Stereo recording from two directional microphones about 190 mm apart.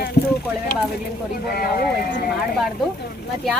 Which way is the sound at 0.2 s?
55° left (ahead or behind).